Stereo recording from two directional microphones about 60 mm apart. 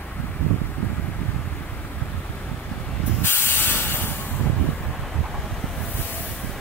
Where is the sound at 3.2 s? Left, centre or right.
Left.